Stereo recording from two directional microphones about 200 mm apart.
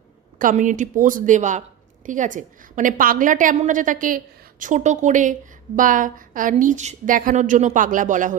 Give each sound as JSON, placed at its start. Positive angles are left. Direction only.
{"t": 0.3, "sound": "a woman's voice", "side_deg": -40}